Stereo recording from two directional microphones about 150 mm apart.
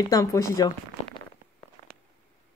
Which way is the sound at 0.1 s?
20° left (ahead or behind).